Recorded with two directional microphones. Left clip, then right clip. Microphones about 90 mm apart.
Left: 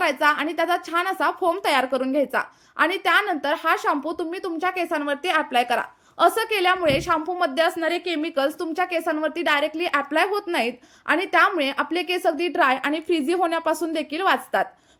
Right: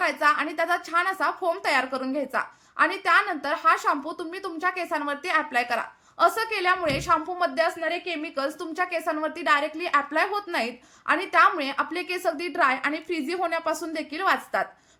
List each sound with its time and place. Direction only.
0.0 s a woman's voice: 50° left (ahead or behind)
2.1 s a woman's voice: 55° left (ahead or behind)
8.2 s a woman's voice: 60° left (ahead or behind)
13.4 s a woman's voice: 45° left (ahead or behind)